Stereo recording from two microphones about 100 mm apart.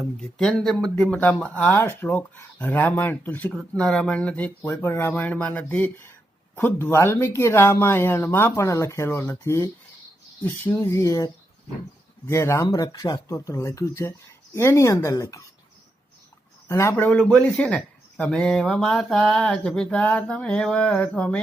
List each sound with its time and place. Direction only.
0.2 s speech: 10° left (ahead or behind)
1.7 s speech: 20° left (ahead or behind)
12.6 s speech: 45° left (ahead or behind)
16.6 s speech: 30° left (ahead or behind)
16.9 s speech: 15° left (ahead or behind)